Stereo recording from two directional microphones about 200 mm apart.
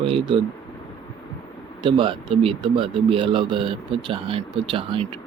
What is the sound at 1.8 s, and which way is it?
Speech, 25° right (ahead or behind).